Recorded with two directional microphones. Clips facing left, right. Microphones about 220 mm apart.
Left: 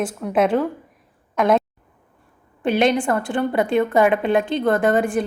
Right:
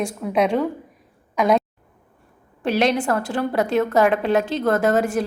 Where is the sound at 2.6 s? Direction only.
Centre (ahead or behind).